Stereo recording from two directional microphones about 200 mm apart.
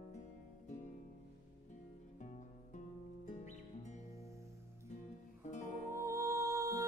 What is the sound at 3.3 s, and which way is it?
Music, 35° left (ahead or behind).